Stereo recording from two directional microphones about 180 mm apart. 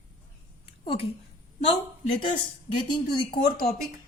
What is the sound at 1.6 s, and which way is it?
Speech, 30° left (ahead or behind).